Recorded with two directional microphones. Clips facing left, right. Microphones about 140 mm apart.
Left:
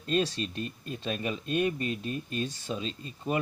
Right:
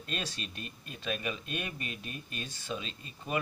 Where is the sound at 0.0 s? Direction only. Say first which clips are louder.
Left 11 dB; 35° left (ahead or behind).